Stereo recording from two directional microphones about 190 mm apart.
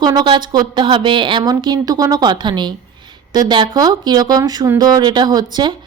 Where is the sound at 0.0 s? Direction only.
20° right (ahead or behind).